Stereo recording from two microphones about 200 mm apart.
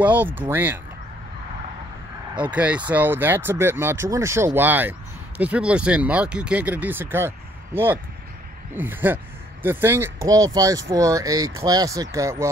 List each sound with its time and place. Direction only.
0.0 s speech: 10° right (ahead or behind)
2.3 s speech: 5° right (ahead or behind)